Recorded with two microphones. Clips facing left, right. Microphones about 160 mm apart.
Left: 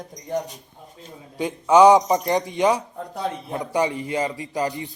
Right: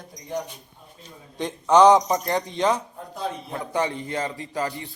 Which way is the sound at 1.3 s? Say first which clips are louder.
Left 2 dB; 10° left (ahead or behind).